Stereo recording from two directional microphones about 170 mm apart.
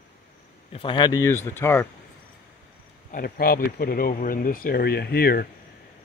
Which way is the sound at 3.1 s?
60° left (ahead or behind).